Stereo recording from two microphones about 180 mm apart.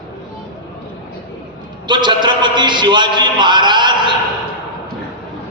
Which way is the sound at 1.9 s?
25° right (ahead or behind).